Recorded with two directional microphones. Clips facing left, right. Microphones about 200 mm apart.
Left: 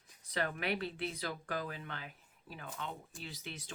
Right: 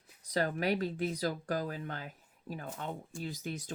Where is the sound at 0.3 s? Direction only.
40° right (ahead or behind).